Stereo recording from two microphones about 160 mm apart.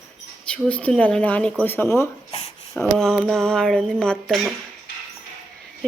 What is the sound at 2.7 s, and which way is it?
Speech, 5° left (ahead or behind).